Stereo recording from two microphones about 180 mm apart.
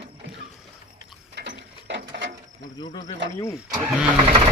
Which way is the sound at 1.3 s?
75° right (ahead or behind).